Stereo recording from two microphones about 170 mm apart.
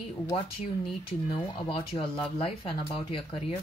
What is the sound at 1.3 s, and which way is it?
Speech, 30° left (ahead or behind).